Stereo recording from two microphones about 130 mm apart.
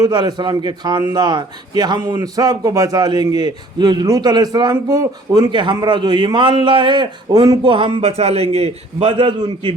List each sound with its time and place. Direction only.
0.0 s a man's voice: 30° right (ahead or behind)